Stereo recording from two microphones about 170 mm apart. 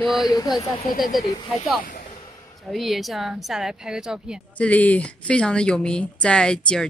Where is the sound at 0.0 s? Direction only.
Centre (ahead or behind).